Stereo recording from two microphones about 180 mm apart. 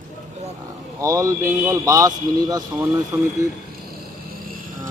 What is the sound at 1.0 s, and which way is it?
A man's voice, 15° right (ahead or behind).